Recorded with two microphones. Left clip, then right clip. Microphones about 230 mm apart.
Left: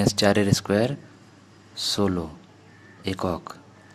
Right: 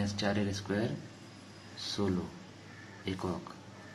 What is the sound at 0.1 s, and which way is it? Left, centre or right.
Speech, left.